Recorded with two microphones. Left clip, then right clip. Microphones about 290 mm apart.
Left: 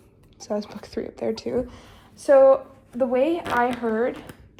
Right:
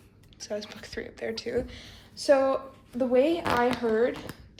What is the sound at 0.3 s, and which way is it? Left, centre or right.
Speech, centre.